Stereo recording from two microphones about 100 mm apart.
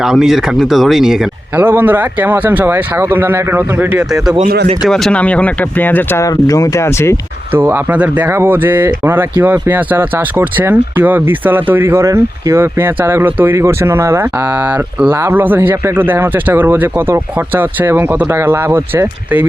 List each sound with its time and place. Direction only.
0.0 s speech: 5° right (ahead or behind)
1.5 s speech: 20° right (ahead or behind)
3.9 s speech: 10° right (ahead or behind)
4.9 s speech: 5° left (ahead or behind); by 6.2 s 20° left (ahead or behind)
6.2 s speech: 35° left (ahead or behind)
7.5 s speech: 20° right (ahead or behind)